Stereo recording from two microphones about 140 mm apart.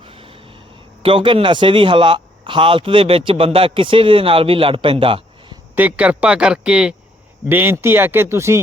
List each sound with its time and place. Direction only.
0.0 s a sound: 40° right (ahead or behind)
1.0 s speech: 40° right (ahead or behind)
5.7 s speech: 10° right (ahead or behind)